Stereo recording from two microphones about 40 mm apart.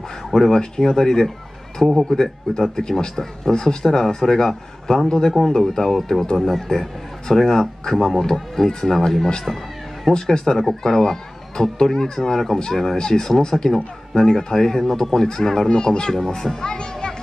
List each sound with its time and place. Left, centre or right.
0.3 s speech: centre
15.7 s speech: left